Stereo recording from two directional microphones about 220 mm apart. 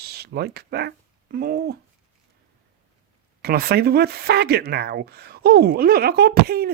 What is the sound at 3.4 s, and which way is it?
Speech, 45° right (ahead or behind).